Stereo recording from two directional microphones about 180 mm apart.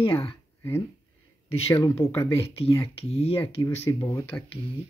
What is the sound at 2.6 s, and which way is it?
Speech, 35° left (ahead or behind).